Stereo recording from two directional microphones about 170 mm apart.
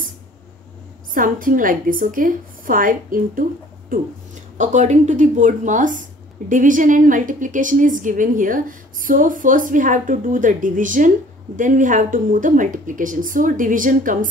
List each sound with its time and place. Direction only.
1.1 s a woman's voice: 55° right (ahead or behind)
4.6 s a woman's voice: 45° right (ahead or behind)